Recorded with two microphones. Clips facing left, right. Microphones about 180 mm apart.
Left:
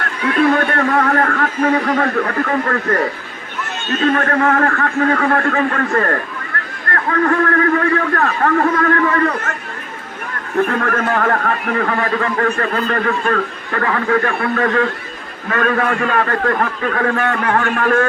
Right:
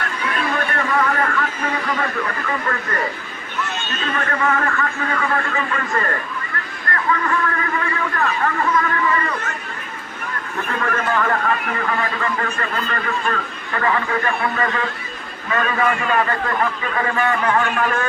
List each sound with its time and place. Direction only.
0.4 s a man's voice: 60° left (ahead or behind)
4.0 s a man's voice: 50° left (ahead or behind)
6.5 s a sound: 65° left (ahead or behind)
6.9 s a man's voice: 60° left (ahead or behind)
10.7 s a man's voice: 55° left (ahead or behind)